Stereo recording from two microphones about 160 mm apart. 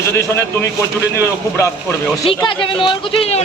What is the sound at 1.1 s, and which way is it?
Speech, 15° left (ahead or behind).